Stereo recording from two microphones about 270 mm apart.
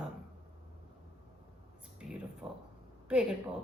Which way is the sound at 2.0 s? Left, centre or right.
Centre.